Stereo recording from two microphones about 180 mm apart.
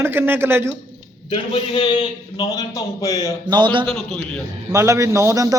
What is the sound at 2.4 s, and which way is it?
Speech, 20° left (ahead or behind).